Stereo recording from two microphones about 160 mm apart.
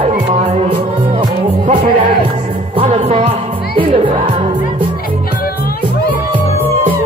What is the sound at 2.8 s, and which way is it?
Music, 40° right (ahead or behind).